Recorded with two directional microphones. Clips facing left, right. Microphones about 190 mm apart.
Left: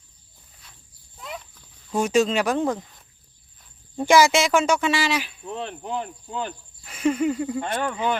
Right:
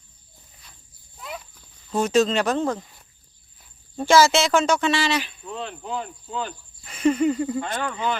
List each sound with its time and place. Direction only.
1.2 s a sound: centre (ahead or behind)
1.9 s speech: 10° left (ahead or behind)
3.9 s speech: 15° left (ahead or behind)
5.5 s speech: 20° left (ahead or behind)